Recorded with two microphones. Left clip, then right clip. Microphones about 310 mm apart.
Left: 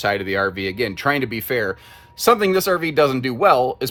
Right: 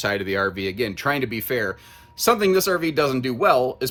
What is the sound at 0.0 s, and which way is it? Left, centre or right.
Speech, centre.